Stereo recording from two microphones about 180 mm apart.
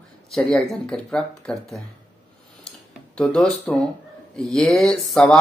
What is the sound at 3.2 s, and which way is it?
Speech, 5° left (ahead or behind).